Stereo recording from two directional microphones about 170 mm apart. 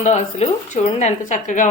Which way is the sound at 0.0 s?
40° left (ahead or behind).